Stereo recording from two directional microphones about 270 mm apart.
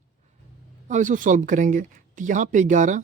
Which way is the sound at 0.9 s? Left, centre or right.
Right.